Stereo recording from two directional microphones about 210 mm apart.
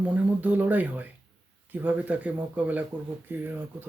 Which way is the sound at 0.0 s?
5° right (ahead or behind).